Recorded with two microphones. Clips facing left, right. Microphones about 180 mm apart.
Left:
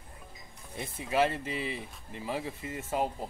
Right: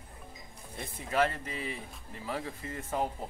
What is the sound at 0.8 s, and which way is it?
Speech, 25° left (ahead or behind).